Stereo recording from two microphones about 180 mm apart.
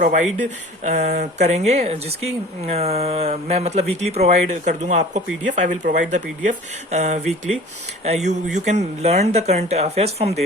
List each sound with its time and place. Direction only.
0.0 s speech: 45° right (ahead or behind)